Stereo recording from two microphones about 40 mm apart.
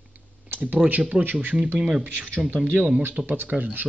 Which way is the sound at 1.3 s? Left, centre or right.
Right.